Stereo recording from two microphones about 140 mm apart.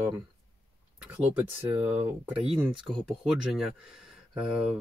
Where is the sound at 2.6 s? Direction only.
5° right (ahead or behind).